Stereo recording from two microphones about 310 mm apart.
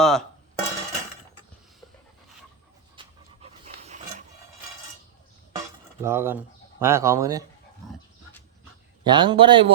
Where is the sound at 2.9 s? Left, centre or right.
Centre.